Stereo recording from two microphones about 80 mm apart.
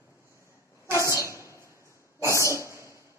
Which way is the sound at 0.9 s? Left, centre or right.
Left.